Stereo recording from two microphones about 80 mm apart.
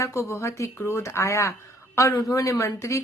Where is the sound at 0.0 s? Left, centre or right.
Left.